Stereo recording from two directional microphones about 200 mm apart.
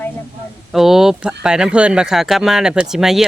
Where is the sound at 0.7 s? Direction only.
Centre (ahead or behind).